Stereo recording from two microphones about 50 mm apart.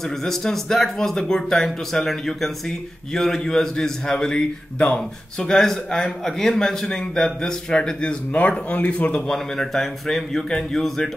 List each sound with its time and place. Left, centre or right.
0.2 s a man's voice: centre
9.6 s a man's voice: centre